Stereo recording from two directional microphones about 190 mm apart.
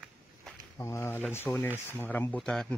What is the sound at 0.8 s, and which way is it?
Speech, 15° left (ahead or behind).